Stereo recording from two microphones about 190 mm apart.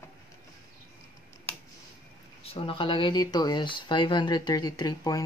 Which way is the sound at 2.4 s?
30° left (ahead or behind).